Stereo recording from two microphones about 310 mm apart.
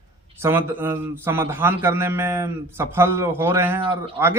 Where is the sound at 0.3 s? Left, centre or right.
Centre.